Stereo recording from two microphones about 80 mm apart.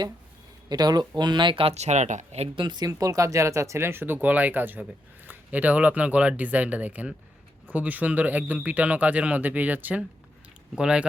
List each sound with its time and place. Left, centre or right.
0.7 s speech: right
2.6 s speech: right; by 11.0 s centre